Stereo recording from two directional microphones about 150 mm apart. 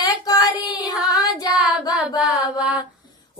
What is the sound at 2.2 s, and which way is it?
Mantra, 10° right (ahead or behind).